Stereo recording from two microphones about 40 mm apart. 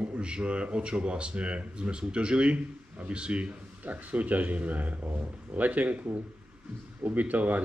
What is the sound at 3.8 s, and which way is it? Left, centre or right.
Speech, right.